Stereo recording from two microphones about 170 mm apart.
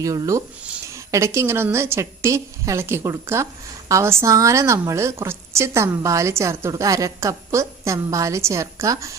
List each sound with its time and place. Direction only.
0.0 s a woman's voice: 20° right (ahead or behind)